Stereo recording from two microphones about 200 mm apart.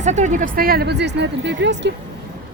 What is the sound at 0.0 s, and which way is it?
Speech, 35° right (ahead or behind).